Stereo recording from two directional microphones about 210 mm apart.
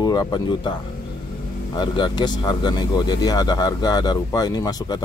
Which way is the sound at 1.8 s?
20° left (ahead or behind).